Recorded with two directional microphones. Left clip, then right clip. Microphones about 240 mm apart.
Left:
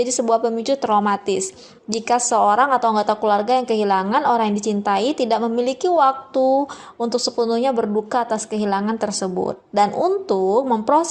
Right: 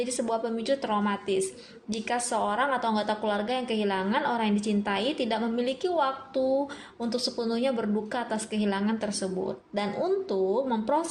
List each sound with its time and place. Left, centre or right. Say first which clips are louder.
0.0 s a woman's voice: left 11 dB; left